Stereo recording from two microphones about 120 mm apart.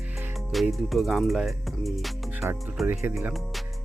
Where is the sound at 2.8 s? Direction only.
20° right (ahead or behind).